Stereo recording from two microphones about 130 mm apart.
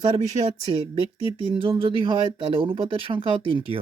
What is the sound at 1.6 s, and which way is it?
Speech, 40° right (ahead or behind).